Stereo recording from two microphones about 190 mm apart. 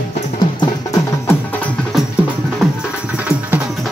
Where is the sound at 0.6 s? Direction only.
20° left (ahead or behind).